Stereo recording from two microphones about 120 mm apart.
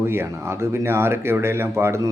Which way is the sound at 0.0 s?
20° right (ahead or behind).